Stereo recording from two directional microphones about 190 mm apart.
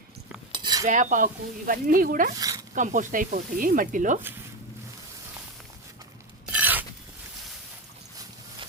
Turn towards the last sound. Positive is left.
turn(degrees=-10)  # may be behind; listen again after turning